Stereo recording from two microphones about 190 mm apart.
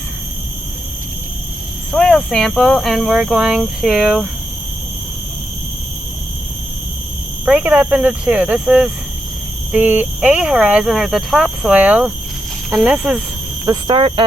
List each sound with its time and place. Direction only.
1.9 s speech: 5° left (ahead or behind)
7.4 s speech: 10° right (ahead or behind)
13.7 s speech: 25° right (ahead or behind)